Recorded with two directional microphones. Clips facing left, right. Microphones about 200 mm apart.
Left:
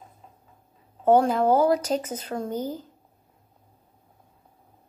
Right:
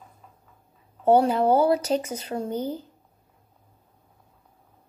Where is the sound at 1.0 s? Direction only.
10° right (ahead or behind).